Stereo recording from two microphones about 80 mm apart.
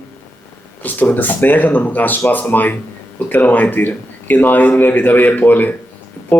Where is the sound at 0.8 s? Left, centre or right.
Left.